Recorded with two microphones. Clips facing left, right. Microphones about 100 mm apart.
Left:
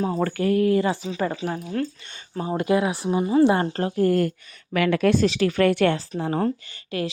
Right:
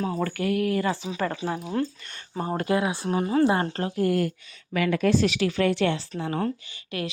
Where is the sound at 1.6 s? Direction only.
20° right (ahead or behind).